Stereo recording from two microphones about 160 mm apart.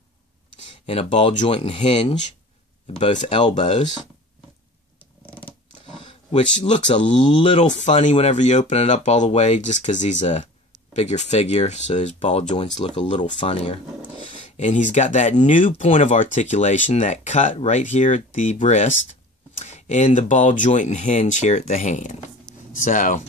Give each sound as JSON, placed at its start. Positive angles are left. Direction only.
{"t": 1.4, "sound": "speech", "side_deg": 35}
{"t": 3.2, "sound": "speech", "side_deg": 30}
{"t": 6.3, "sound": "speech", "side_deg": 45}
{"t": 6.9, "sound": "speech", "side_deg": 35}
{"t": 14.4, "sound": "speech", "side_deg": 50}